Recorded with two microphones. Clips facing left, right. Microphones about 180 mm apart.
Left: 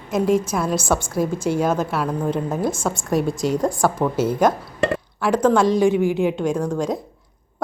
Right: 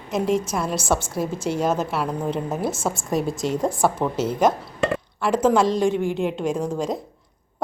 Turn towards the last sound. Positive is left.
turn(degrees=0)  # may be behind; listen again after turning